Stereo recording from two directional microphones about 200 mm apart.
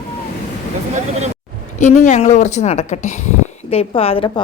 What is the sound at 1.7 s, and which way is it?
A woman's voice, 40° left (ahead or behind).